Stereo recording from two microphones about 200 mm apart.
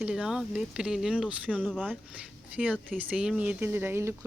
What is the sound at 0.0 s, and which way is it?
Speech, 5° right (ahead or behind).